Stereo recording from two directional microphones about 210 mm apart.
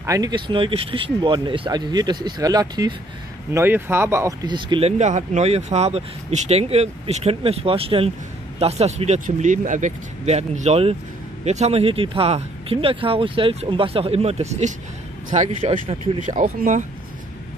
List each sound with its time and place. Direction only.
0.0 s speech: 15° right (ahead or behind); by 16.8 s 35° right (ahead or behind)